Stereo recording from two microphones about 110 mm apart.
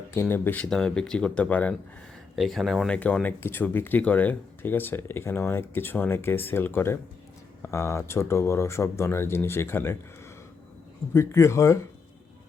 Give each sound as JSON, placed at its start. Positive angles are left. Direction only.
{"t": 0.1, "sound": "speech", "side_deg": 20}
{"t": 0.7, "sound": "speech", "side_deg": 5}
{"t": 2.3, "sound": "speech", "side_deg": 0}
{"t": 11.1, "sound": "speech", "side_deg": 25}